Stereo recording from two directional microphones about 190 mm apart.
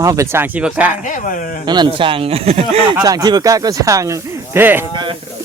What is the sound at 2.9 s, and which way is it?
Speech, 20° right (ahead or behind).